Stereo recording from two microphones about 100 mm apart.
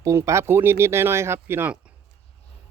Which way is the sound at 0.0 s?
30° right (ahead or behind).